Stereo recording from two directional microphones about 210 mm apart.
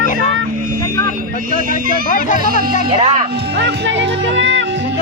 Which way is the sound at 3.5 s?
55° right (ahead or behind).